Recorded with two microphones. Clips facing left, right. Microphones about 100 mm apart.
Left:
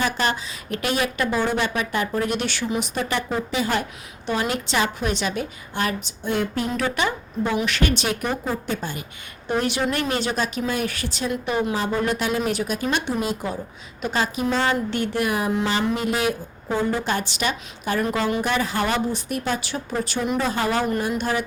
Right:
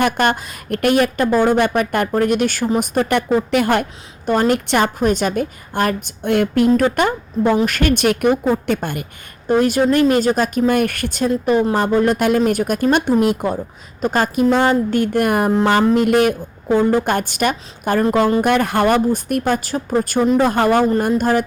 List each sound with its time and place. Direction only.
0.0 s a woman's voice: 55° right (ahead or behind)
9.5 s a woman's voice: 45° right (ahead or behind)
18.4 s speech: 55° right (ahead or behind)